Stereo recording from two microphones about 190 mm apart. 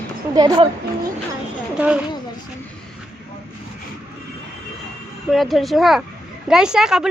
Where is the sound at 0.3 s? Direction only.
20° right (ahead or behind).